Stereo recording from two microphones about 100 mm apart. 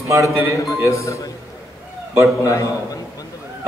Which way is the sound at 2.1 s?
25° right (ahead or behind).